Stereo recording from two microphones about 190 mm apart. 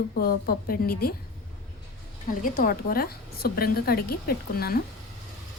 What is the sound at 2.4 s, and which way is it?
A woman's voice, 45° left (ahead or behind).